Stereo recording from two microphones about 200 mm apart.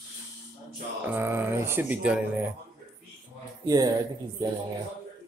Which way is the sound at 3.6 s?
20° right (ahead or behind).